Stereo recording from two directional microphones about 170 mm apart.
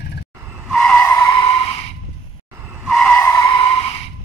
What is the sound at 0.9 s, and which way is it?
Vehicle, 20° left (ahead or behind).